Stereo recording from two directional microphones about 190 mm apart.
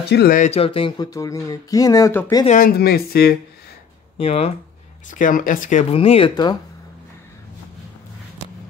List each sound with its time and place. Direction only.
0.0 s speech: 60° left (ahead or behind)
0.4 s speech: 30° left (ahead or behind); by 2.4 s 15° left (ahead or behind)
2.4 s speech: 45° left (ahead or behind)
4.2 s speech: 35° left (ahead or behind)